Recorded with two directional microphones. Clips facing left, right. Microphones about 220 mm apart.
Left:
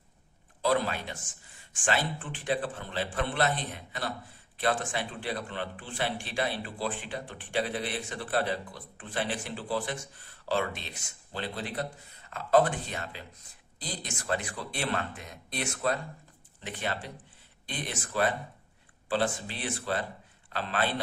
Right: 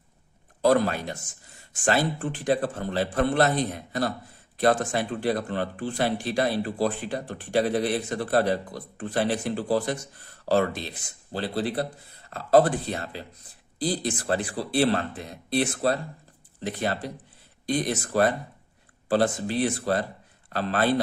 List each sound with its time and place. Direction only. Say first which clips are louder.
0.6 s speech: right 7 dB; 45° right (ahead or behind)